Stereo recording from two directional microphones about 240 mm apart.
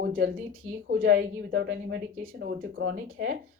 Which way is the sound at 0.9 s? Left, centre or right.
Right.